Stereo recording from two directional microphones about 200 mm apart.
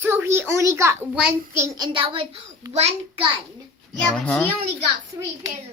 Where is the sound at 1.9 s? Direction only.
25° right (ahead or behind).